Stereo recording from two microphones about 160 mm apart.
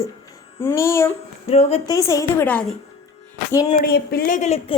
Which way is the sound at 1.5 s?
40° left (ahead or behind).